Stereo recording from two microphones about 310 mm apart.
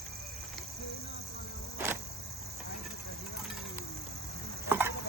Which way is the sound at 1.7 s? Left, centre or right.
Centre.